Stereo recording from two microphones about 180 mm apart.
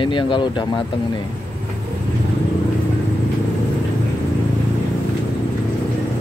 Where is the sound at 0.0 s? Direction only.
25° left (ahead or behind).